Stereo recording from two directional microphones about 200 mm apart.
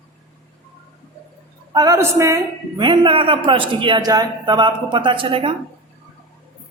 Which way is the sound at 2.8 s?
25° right (ahead or behind).